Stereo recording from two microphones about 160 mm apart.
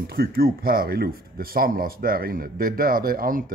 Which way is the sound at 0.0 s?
75° right (ahead or behind).